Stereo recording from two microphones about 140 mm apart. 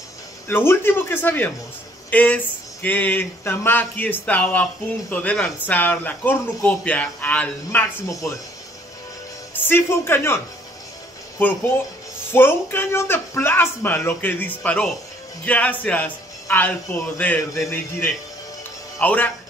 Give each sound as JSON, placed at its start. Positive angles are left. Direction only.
{"t": 0.5, "sound": "speech", "side_deg": 15}
{"t": 9.5, "sound": "speech", "side_deg": 15}
{"t": 12.3, "sound": "speech", "side_deg": 15}